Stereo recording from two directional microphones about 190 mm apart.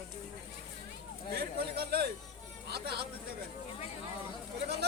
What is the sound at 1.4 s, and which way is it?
Speech, 55° right (ahead or behind).